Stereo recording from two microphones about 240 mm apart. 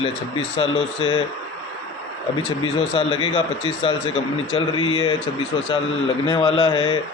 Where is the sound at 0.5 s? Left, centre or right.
Left.